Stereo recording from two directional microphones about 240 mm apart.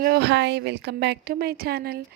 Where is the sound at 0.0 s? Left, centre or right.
Right.